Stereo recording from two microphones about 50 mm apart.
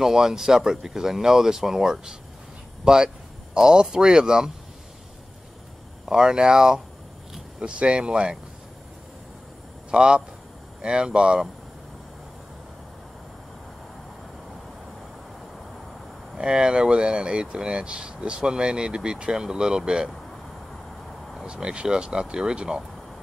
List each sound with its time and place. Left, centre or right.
0.0 s speech: centre
6.0 s speech: centre
9.8 s a man's voice: centre
16.3 s speech: centre
21.5 s speech: centre